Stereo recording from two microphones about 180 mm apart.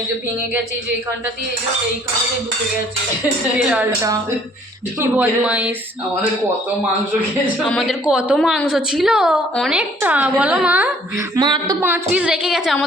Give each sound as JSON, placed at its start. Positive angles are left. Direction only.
{"t": 3.7, "sound": "speech", "side_deg": -10}
{"t": 7.6, "sound": "a woman's voice", "side_deg": 0}
{"t": 11.3, "sound": "a sound", "side_deg": -25}
{"t": 11.8, "sound": "a woman's voice", "side_deg": -10}